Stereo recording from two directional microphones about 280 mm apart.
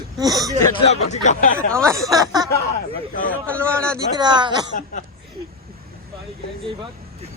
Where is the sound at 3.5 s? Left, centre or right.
Centre.